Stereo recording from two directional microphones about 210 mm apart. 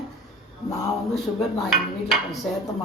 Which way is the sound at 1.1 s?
Centre (ahead or behind).